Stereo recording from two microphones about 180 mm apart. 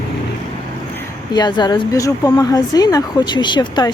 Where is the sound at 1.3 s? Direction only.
25° left (ahead or behind).